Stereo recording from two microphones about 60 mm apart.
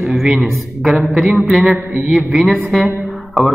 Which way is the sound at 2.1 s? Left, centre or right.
Centre.